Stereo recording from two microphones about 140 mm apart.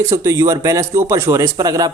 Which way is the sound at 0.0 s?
20° right (ahead or behind).